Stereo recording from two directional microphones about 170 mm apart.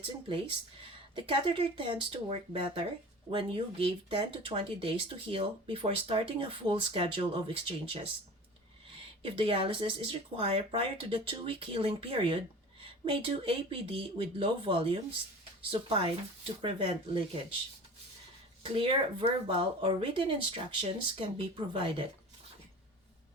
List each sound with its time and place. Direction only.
0.0 s speech: 30° right (ahead or behind)
9.2 s speech: 35° right (ahead or behind)
18.6 s speech: 35° right (ahead or behind)